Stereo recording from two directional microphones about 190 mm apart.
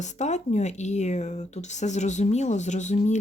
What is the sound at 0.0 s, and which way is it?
Speech, 35° left (ahead or behind).